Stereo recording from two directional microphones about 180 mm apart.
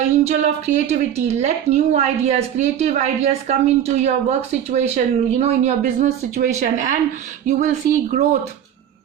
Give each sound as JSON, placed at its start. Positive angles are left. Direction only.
{"t": 0.3, "sound": "a woman's voice", "side_deg": -40}